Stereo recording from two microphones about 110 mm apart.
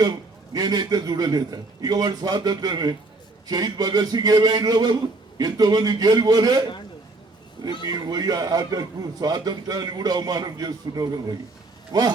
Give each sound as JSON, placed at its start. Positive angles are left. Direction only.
{"t": 0.5, "sound": "a man's voice", "side_deg": -40}
{"t": 7.9, "sound": "a man's voice", "side_deg": -35}